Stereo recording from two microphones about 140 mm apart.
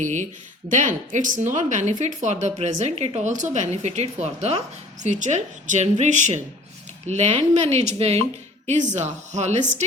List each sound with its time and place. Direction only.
0.0 s a woman's voice: 60° right (ahead or behind)
8.6 s a woman's voice: 60° right (ahead or behind)